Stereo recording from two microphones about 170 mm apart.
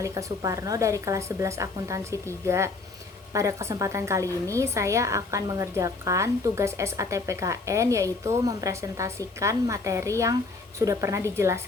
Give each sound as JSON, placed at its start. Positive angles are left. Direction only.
{"t": 0.0, "sound": "a woman's voice", "side_deg": -20}